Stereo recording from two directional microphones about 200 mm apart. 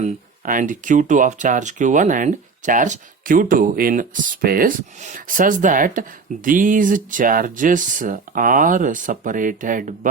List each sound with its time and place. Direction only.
0.0 s speech: 40° right (ahead or behind)